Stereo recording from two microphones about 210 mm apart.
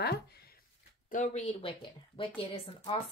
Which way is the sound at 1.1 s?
35° left (ahead or behind).